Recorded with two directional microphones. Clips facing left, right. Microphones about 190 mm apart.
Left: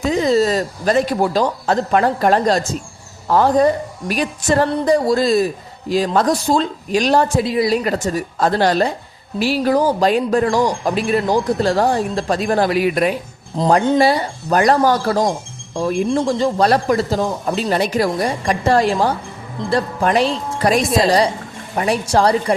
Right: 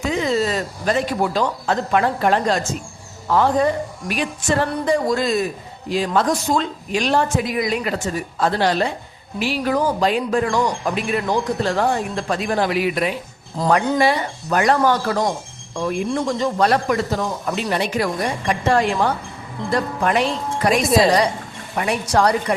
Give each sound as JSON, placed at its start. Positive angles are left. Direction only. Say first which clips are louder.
{"t": 0.0, "sound": "speech", "louder": "left 5 dB", "side_deg": 35}
{"t": 13.6, "sound": "speech", "louder": "left 4 dB", "side_deg": 25}
{"t": 20.8, "sound": "a woman's voice", "louder": "right 1 dB", "side_deg": 0}
{"t": 21.8, "sound": "speech", "louder": "left 2 dB", "side_deg": 30}